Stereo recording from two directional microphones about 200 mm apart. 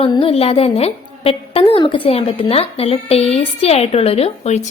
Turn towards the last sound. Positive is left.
turn(degrees=30)  # may be behind; listen again after turning